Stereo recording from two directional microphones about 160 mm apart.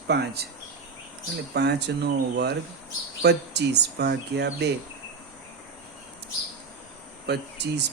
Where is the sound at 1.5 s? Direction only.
90° right.